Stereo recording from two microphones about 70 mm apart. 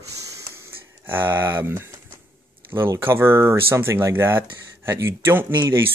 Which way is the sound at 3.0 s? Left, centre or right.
Right.